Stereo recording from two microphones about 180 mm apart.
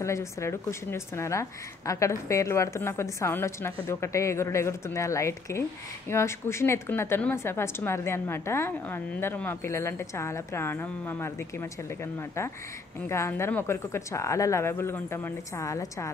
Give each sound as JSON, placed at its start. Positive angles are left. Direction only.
{"t": 0.0, "sound": "a woman's voice", "side_deg": 15}